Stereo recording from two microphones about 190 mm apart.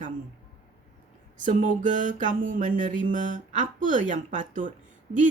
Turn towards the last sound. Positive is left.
turn(degrees=-40)  # may be behind; listen again after turning